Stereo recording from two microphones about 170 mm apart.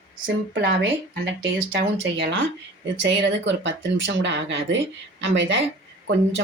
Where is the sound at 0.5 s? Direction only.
85° right.